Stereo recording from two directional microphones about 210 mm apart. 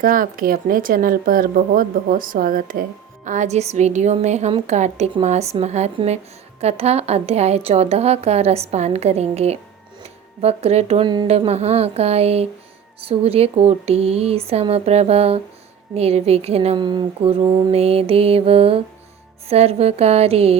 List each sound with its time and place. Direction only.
0.0 s a woman's voice: 40° right (ahead or behind)